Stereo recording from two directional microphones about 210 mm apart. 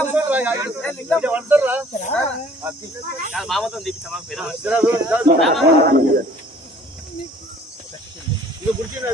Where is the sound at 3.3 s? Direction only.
Centre (ahead or behind).